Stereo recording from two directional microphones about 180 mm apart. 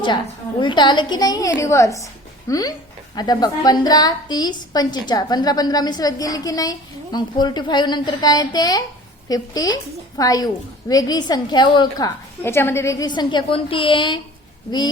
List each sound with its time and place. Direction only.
0.6 s a woman's voice: 25° left (ahead or behind)